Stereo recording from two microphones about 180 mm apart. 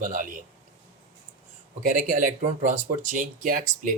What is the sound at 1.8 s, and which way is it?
Speech, 45° right (ahead or behind).